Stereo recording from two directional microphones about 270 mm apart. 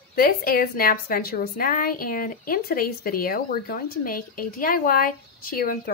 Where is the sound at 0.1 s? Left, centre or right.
Left.